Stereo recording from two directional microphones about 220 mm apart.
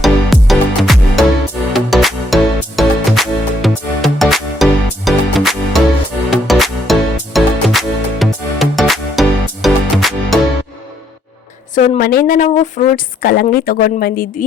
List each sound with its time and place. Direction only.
0.0 s music: centre (ahead or behind)
11.7 s a woman's voice: 40° left (ahead or behind)